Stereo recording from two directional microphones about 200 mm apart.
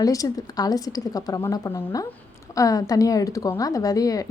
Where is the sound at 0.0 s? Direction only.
15° left (ahead or behind).